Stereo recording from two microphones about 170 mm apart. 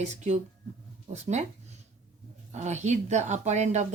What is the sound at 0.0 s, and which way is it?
Speech, 45° right (ahead or behind).